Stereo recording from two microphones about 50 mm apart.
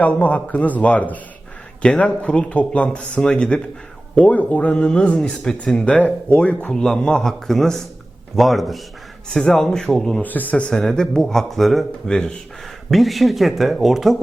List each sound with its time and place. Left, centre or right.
0.0 s speech: left
2.0 s speech: centre
4.1 s speech: left
6.7 s speech: centre
9.3 s speech: centre
10.2 s speech: left
10.9 s speech: centre
12.0 s speech: centre
12.9 s speech: centre